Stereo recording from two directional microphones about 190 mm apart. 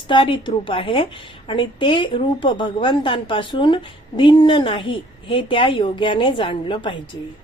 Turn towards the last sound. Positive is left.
turn(degrees=25)  # may be behind; listen again after turning